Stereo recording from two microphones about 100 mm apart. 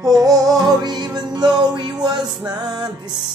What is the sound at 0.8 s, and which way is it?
Music, 45° right (ahead or behind).